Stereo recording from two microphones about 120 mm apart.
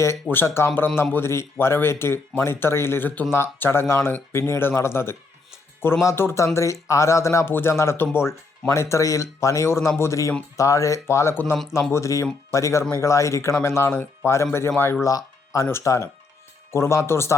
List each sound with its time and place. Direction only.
0.0 s speech: 20° left (ahead or behind)
15.0 s music: 25° left (ahead or behind)
15.7 s speech: 25° left (ahead or behind)